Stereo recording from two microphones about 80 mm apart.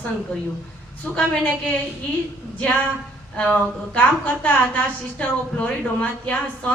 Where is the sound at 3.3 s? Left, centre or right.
Centre.